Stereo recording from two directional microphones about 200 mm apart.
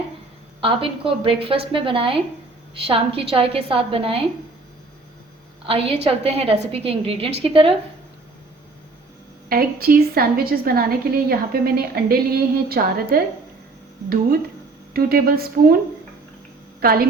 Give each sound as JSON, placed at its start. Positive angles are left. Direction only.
{"t": 0.6, "sound": "a woman's voice", "side_deg": -25}
{"t": 5.6, "sound": "a woman's voice", "side_deg": -30}
{"t": 9.5, "sound": "a woman's voice", "side_deg": -50}
{"t": 14.9, "sound": "a woman's voice", "side_deg": -50}
{"t": 16.8, "sound": "a woman's voice", "side_deg": -50}